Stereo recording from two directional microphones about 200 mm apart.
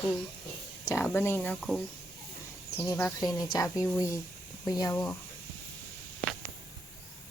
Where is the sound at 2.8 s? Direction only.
10° left (ahead or behind).